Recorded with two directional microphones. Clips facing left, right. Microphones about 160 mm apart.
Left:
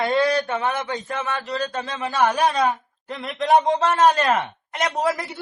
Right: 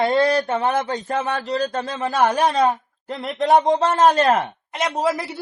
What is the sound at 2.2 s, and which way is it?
A woman's voice, 30° right (ahead or behind).